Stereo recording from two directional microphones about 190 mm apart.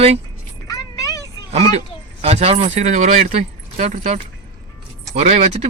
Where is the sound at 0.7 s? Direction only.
20° left (ahead or behind).